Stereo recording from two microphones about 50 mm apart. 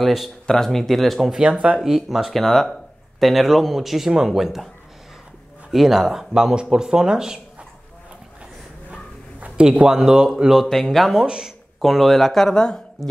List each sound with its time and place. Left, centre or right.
0.0 s speech: centre
1.3 s speech: centre
1.8 s speech: centre
5.7 s speech: centre
9.6 s speech: centre
10.5 s speech: centre
11.2 s speech: centre
11.8 s speech: centre